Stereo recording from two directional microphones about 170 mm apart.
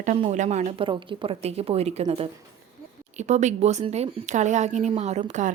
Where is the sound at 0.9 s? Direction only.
30° right (ahead or behind).